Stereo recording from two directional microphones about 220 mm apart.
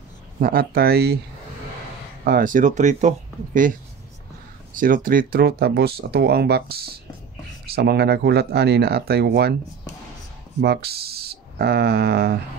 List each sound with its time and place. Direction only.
0.4 s speech: 45° right (ahead or behind)
2.2 s speech: 40° right (ahead or behind)
4.7 s speech: 40° right (ahead or behind)
10.6 s speech: 45° right (ahead or behind)